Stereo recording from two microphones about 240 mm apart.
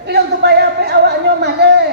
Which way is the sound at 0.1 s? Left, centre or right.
Right.